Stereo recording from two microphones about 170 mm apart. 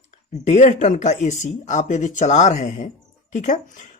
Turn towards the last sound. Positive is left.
turn(degrees=50)  # may be behind; listen again after turning